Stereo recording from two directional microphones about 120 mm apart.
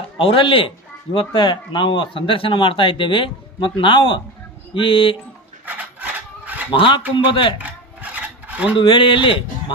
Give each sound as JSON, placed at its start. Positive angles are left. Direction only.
{"t": 0.2, "sound": "speech", "side_deg": 50}
{"t": 5.6, "sound": "filing", "side_deg": -15}
{"t": 6.7, "sound": "speech", "side_deg": 45}
{"t": 8.1, "sound": "filing", "side_deg": -10}
{"t": 8.7, "sound": "speech", "side_deg": 45}